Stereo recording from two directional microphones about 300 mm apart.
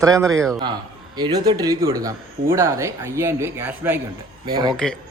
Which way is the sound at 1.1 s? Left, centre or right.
Centre.